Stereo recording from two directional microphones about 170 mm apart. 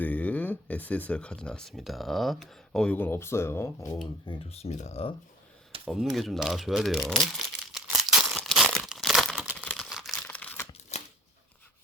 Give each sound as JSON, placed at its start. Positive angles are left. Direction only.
{"t": 0.0, "sound": "speech", "side_deg": 10}
{"t": 4.3, "sound": "speech", "side_deg": 40}
{"t": 5.9, "sound": "crumpling", "side_deg": 0}
{"t": 10.2, "sound": "crumpling", "side_deg": 10}
{"t": 10.7, "sound": "a sound", "side_deg": 40}